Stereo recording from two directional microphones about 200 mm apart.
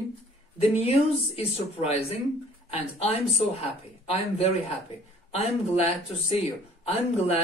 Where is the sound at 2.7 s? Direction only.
30° left (ahead or behind).